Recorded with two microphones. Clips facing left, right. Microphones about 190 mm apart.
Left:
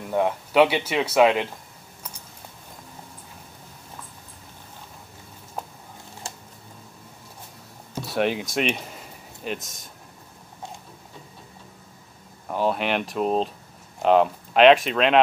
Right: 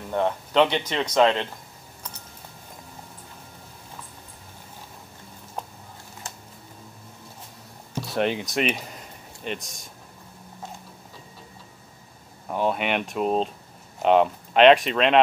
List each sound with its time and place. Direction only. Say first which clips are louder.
0.1 s speech: left 1 dB; 10° left (ahead or behind)
6.2 s a sound: left 2 dB; 30° left (ahead or behind)
8.1 s speech: left 1 dB; 5° left (ahead or behind)
12.4 s speech: left 1 dB; centre (ahead or behind)